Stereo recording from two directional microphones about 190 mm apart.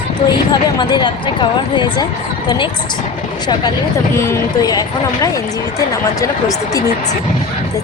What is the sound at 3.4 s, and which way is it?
A woman's voice, 20° left (ahead or behind).